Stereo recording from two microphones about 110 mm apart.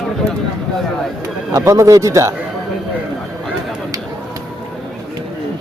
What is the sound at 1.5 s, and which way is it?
Speech, 30° right (ahead or behind).